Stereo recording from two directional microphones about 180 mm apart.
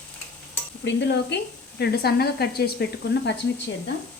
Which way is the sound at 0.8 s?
75° left (ahead or behind).